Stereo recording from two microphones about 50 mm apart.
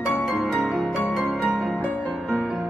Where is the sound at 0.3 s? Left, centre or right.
Centre.